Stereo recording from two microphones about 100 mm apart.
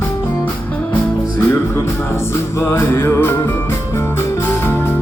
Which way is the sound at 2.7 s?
25° left (ahead or behind).